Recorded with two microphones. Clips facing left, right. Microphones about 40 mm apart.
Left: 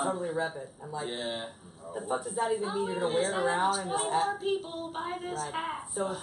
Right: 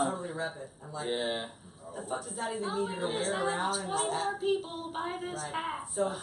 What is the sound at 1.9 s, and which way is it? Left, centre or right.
A woman's voice, centre.